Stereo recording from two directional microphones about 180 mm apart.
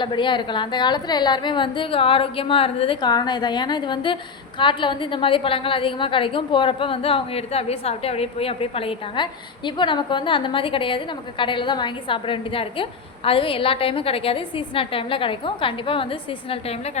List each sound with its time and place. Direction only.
0.0 s a woman's voice: 25° left (ahead or behind)